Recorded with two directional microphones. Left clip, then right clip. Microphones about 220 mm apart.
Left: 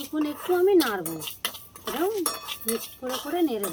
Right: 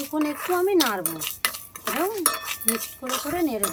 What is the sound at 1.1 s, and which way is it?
Cutlery, 15° right (ahead or behind).